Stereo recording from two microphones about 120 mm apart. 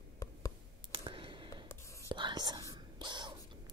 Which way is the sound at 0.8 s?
45° right (ahead or behind).